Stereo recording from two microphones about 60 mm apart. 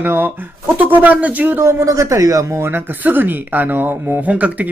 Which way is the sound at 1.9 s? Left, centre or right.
Right.